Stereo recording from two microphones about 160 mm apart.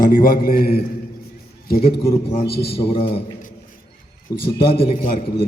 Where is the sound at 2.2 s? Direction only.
35° left (ahead or behind).